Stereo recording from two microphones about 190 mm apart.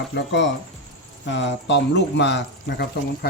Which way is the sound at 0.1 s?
65° left (ahead or behind).